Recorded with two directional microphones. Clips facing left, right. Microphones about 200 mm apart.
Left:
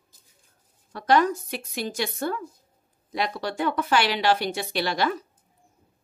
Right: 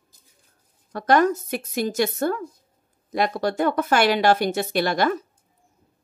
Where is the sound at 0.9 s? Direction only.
50° right (ahead or behind).